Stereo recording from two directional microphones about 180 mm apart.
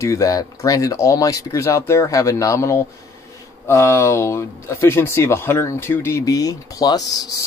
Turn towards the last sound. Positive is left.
turn(degrees=20)  # may be behind; listen again after turning